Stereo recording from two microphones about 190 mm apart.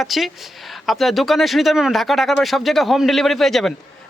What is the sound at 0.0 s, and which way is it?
Speech, centre (ahead or behind).